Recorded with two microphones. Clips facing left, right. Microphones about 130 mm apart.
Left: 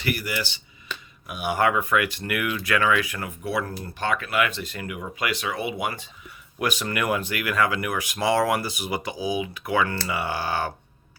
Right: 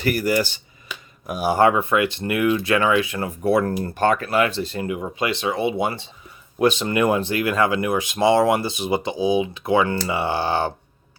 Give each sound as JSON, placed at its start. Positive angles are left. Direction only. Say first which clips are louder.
{"t": 0.0, "sound": "speech", "louder": "right 8 dB", "side_deg": -40}
{"t": 0.9, "sound": "a sound", "louder": "even", "side_deg": -10}
{"t": 1.3, "sound": "speech", "louder": "right 6 dB", "side_deg": -35}
{"t": 3.4, "sound": "speech", "louder": "right 10 dB", "side_deg": -50}